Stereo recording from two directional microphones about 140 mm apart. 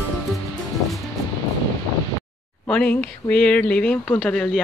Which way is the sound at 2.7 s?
10° left (ahead or behind).